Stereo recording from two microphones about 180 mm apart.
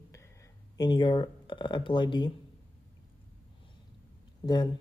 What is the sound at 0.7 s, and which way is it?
Speech, 25° left (ahead or behind).